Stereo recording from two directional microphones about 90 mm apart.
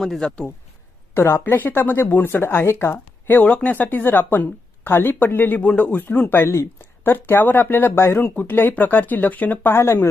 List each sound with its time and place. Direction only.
0.0 s speech: 5° left (ahead or behind)
1.1 s speech: 30° left (ahead or behind)